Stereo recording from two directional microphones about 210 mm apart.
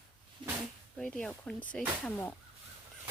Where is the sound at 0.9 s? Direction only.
5° left (ahead or behind).